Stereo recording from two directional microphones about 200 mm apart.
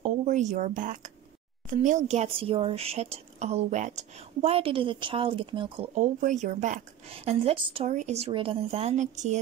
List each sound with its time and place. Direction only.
0.0 s speech: 35° right (ahead or behind)
5.9 s a woman's voice: 35° right (ahead or behind)